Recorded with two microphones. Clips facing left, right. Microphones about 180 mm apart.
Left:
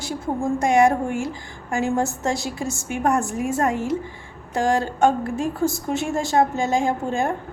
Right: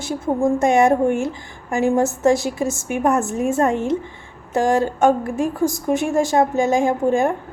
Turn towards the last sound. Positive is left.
turn(degrees=-20)  # may be behind; listen again after turning